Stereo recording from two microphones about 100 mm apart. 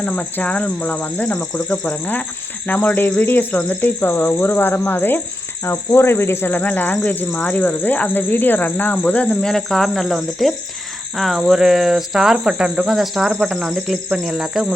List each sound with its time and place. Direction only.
0.0 s speech: 15° left (ahead or behind); by 14.7 s 5° right (ahead or behind)